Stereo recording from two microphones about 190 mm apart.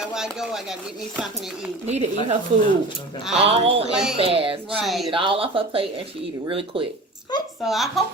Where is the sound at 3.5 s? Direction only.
30° right (ahead or behind).